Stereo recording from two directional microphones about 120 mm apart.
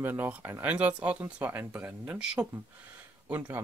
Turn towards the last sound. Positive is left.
turn(degrees=-15)  # may be behind; listen again after turning